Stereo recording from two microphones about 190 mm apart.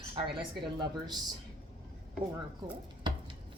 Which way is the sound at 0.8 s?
20° right (ahead or behind).